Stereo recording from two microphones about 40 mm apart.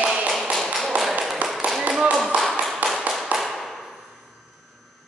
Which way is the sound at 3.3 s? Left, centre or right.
Right.